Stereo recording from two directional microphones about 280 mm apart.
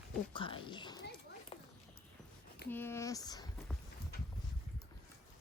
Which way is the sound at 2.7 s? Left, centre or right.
Centre.